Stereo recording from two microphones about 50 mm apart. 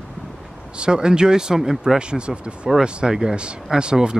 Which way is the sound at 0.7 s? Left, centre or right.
Centre.